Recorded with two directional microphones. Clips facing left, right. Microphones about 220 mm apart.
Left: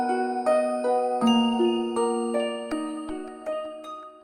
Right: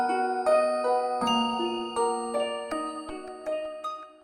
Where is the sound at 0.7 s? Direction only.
Centre (ahead or behind).